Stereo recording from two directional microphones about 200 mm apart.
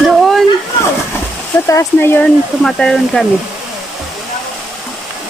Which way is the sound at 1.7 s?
15° left (ahead or behind).